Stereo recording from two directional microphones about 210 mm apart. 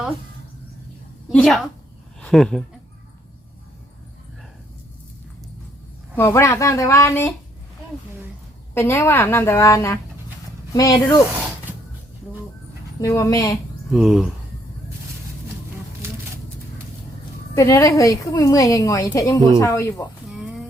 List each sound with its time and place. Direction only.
1.3 s a woman's voice: 5° left (ahead or behind)
6.1 s a woman's voice: 10° left (ahead or behind)
8.7 s a woman's voice: 10° left (ahead or behind)
13.0 s a woman's voice: 15° left (ahead or behind)
13.9 s a woman's voice: centre (ahead or behind)
17.5 s a woman's voice: 15° left (ahead or behind)
20.3 s a sound: 5° right (ahead or behind)